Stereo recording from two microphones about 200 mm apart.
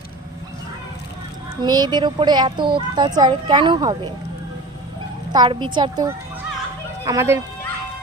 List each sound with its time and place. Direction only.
1.6 s speech: 20° right (ahead or behind)
5.3 s speech: 20° right (ahead or behind)